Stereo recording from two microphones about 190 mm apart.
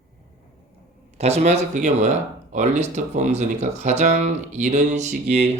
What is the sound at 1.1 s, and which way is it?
Speech, 35° right (ahead or behind).